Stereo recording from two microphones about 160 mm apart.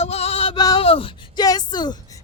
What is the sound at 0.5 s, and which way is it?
Speech, 25° left (ahead or behind).